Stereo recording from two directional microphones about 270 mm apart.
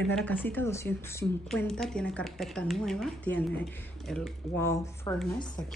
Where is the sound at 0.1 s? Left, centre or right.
Centre.